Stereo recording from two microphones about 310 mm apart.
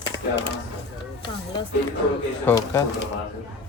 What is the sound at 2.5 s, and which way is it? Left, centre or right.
Speech, centre.